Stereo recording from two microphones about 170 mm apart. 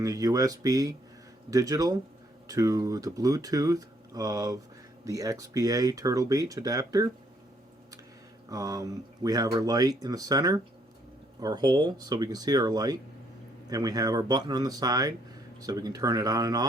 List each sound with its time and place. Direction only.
0.0 s speech: 20° right (ahead or behind)
8.4 s speech: 20° right (ahead or behind)